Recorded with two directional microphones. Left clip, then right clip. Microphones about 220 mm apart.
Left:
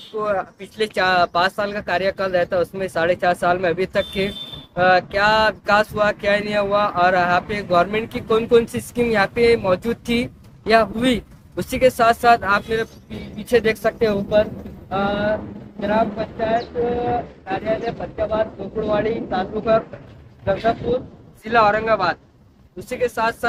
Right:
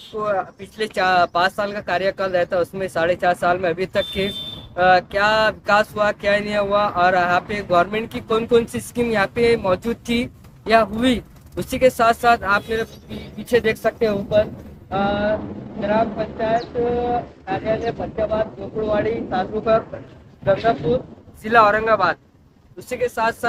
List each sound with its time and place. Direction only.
0.2 s a sound: centre (ahead or behind)
14.8 s speech: 15° right (ahead or behind)
18.9 s speech: 25° right (ahead or behind)
22.9 s speech: 10° right (ahead or behind)